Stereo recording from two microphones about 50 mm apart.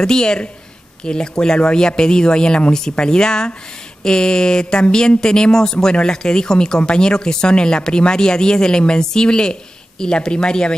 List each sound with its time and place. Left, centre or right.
0.0 s speech: centre